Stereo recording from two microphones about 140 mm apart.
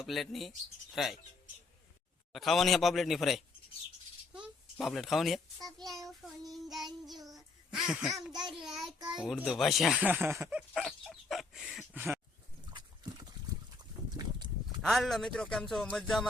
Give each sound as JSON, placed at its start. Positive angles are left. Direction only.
{"t": 0.0, "sound": "a child's voice", "side_deg": 0}
{"t": 2.3, "sound": "a child's voice", "side_deg": 0}
{"t": 4.8, "sound": "a child's voice", "side_deg": 0}
{"t": 7.2, "sound": "child singing", "side_deg": -25}
{"t": 7.7, "sound": "speech", "side_deg": -5}
{"t": 8.3, "sound": "child singing", "side_deg": -30}
{"t": 8.6, "sound": "a child's voice", "side_deg": 0}
{"t": 10.5, "sound": "dog", "side_deg": 0}
{"t": 11.9, "sound": "a sound", "side_deg": -15}
{"t": 14.8, "sound": "a child's voice", "side_deg": 0}